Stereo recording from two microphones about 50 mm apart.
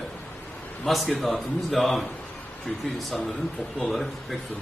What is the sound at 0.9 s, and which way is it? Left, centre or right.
A man's voice, centre.